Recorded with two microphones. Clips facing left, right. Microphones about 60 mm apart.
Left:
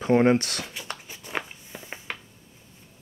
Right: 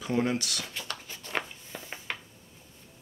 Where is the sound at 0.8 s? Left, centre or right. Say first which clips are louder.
Left 2 dB; centre.